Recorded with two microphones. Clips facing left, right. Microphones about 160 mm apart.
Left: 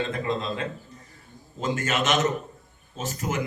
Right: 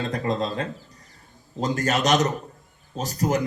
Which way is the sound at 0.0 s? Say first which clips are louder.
Right 2 dB; 40° right (ahead or behind).